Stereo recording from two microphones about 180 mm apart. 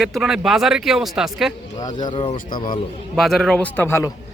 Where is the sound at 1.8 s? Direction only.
20° left (ahead or behind).